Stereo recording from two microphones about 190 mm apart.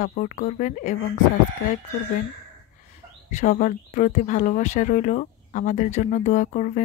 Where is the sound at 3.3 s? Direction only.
40° left (ahead or behind).